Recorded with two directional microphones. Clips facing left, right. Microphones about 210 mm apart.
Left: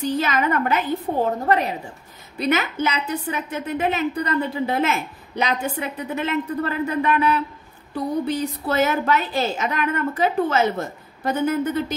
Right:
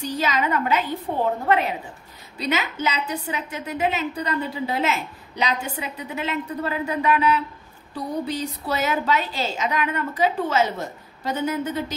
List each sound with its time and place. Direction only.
0.0 s a woman's voice: 50° left (ahead or behind)
2.3 s a woman's voice: 55° left (ahead or behind)